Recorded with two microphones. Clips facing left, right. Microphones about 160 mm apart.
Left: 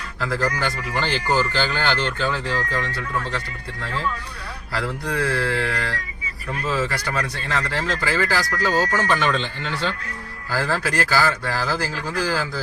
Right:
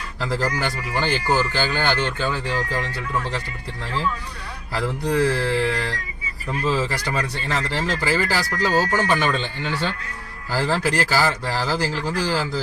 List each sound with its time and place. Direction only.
0.2 s speech: 15° right (ahead or behind)
4.7 s speech: 15° right (ahead or behind)
10.5 s speech: 15° right (ahead or behind)